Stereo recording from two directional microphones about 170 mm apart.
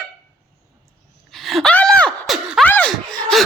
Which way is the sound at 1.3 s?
Centre (ahead or behind).